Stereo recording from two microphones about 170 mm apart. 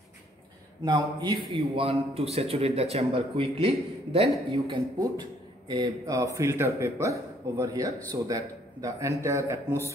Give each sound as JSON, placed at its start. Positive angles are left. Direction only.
{"t": 0.8, "sound": "a man's voice", "side_deg": -25}